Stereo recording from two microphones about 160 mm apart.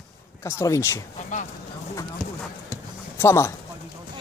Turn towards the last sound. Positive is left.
turn(degrees=15)  # may be behind; listen again after turning